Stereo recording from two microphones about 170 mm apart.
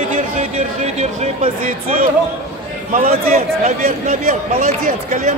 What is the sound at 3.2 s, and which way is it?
Speech, 40° right (ahead or behind).